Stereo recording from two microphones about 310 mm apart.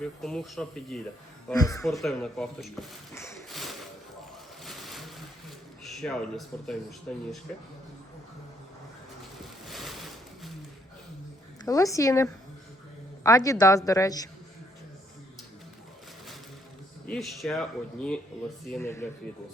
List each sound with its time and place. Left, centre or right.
0.0 s a man's voice: centre
1.9 s speech: centre
4.6 s a sound: centre
5.8 s speech: centre
9.6 s a sound: centre
11.6 s a woman's voice: centre
17.1 s a man's voice: centre